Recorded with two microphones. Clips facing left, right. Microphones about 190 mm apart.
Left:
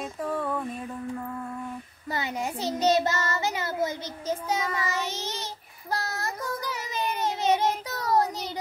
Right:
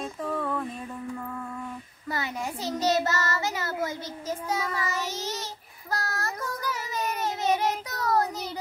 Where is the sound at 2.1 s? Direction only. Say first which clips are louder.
Left 2 dB; 20° left (ahead or behind).